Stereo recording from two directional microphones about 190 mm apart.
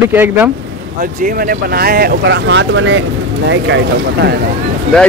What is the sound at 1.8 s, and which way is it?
Speech, 55° right (ahead or behind).